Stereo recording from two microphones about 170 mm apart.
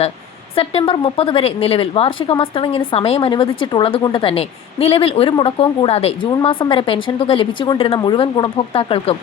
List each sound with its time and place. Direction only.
0.5 s speech: 35° left (ahead or behind)